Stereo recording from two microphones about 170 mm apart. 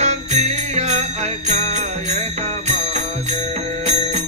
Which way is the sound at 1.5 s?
40° right (ahead or behind).